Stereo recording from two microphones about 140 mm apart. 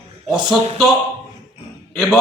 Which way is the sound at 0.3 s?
35° right (ahead or behind).